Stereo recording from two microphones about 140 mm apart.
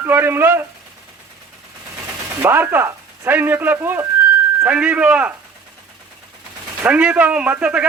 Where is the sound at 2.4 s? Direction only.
15° right (ahead or behind).